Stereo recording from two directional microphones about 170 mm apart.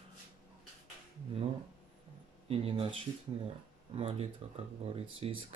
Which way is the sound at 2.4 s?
35° right (ahead or behind).